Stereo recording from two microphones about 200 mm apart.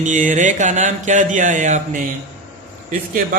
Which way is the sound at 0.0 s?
40° right (ahead or behind).